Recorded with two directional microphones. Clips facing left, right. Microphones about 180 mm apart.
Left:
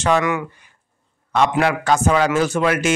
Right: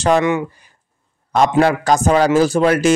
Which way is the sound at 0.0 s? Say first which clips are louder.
Right 3 dB; 30° right (ahead or behind).